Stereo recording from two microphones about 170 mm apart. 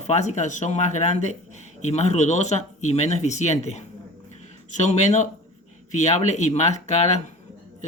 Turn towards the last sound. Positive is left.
turn(degrees=40)  # may be behind; listen again after turning